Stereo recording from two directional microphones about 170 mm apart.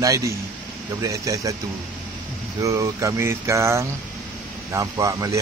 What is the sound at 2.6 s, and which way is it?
Speech, 20° right (ahead or behind).